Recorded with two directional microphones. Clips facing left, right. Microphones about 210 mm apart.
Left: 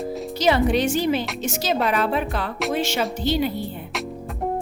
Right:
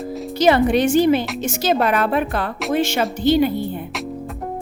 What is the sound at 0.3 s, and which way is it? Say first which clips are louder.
Speech: right 4 dB; 55° right (ahead or behind).